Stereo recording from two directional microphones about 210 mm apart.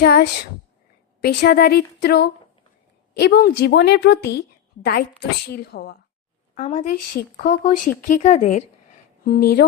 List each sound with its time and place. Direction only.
0.0 s a woman's voice: 45° left (ahead or behind)
6.5 s speech: 35° left (ahead or behind)
7.2 s a woman's voice: 45° left (ahead or behind)
9.2 s a woman's voice: 45° left (ahead or behind)